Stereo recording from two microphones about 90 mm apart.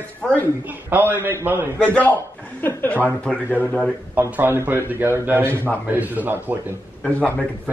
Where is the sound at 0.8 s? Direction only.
25° right (ahead or behind).